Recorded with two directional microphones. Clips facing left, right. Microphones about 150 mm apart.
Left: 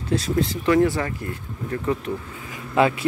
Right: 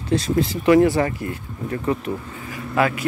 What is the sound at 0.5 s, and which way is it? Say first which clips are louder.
Speech: right 5 dB; 10° right (ahead or behind).